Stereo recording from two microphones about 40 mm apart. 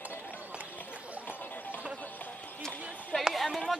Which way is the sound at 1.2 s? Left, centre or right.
Left.